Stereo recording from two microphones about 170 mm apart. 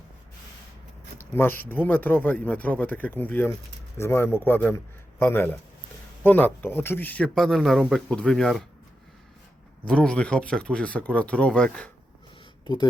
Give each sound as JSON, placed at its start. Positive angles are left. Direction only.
{"t": 1.3, "sound": "speech", "side_deg": 10}
{"t": 9.8, "sound": "speech", "side_deg": 5}
{"t": 12.6, "sound": "speech", "side_deg": 25}